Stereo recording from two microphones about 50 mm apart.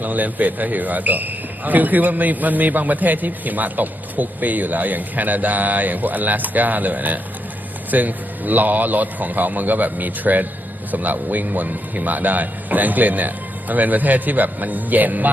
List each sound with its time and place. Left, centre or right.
0.0 s a man's voice: right